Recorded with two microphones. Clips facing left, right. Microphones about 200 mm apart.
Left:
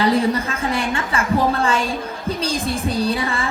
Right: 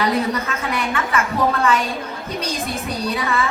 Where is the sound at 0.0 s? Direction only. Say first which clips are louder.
Left 3 dB; 30° left (ahead or behind).